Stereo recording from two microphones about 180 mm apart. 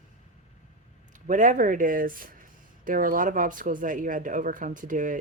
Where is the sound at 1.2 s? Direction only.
45° right (ahead or behind).